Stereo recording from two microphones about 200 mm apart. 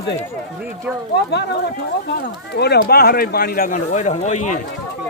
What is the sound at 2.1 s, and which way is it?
Speech, 55° left (ahead or behind).